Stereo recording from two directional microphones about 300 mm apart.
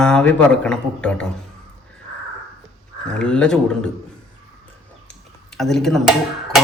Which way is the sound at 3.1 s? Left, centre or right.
Centre.